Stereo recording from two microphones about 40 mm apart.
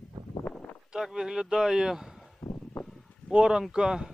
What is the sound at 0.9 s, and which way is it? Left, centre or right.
Speech, centre.